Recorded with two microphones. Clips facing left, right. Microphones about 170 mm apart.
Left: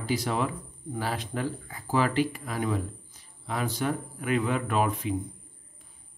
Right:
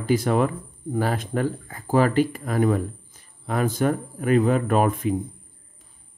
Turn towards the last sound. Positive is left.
turn(degrees=-50)  # may be behind; listen again after turning